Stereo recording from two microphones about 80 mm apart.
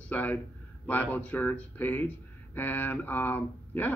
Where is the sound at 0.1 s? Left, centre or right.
Left.